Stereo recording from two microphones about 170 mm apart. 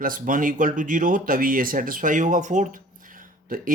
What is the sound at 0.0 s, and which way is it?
Speech, 50° right (ahead or behind).